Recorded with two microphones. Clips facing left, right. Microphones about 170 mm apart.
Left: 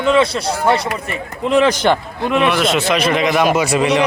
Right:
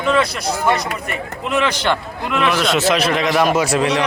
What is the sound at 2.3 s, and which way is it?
A man's voice, centre (ahead or behind).